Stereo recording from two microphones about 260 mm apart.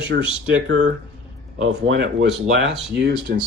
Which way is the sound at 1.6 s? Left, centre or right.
Right.